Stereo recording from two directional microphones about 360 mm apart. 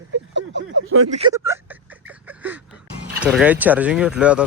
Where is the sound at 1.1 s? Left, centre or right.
Centre.